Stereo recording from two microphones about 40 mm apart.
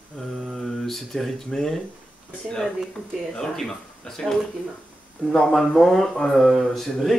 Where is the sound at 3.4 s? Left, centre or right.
Centre.